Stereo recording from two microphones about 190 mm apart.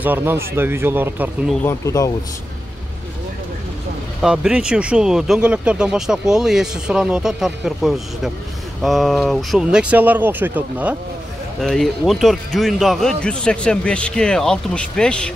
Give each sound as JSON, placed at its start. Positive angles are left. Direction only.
{"t": 0.0, "sound": "speech", "side_deg": -10}
{"t": 1.6, "sound": "speech", "side_deg": 15}
{"t": 4.2, "sound": "speech", "side_deg": -5}
{"t": 11.6, "sound": "speech", "side_deg": 5}